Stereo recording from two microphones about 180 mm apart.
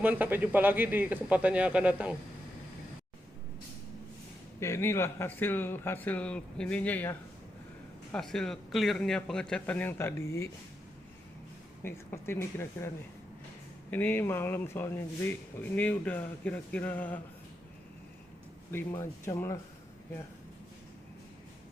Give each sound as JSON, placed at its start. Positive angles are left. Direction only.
{"t": 0.0, "sound": "speech", "side_deg": -10}
{"t": 4.6, "sound": "a man's voice", "side_deg": 15}
{"t": 11.8, "sound": "speech", "side_deg": 15}
{"t": 13.9, "sound": "speech", "side_deg": 10}
{"t": 18.7, "sound": "speech", "side_deg": 15}
{"t": 18.9, "sound": "speech", "side_deg": 25}